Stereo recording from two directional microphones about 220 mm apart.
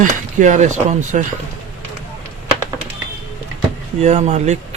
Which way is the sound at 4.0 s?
30° right (ahead or behind).